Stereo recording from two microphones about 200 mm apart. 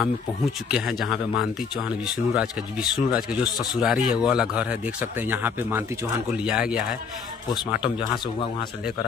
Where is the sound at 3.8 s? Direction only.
5° right (ahead or behind).